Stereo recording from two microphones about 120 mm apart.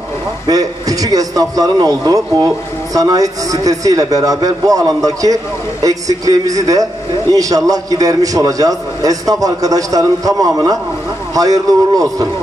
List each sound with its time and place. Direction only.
0.5 s a man's voice: 30° right (ahead or behind)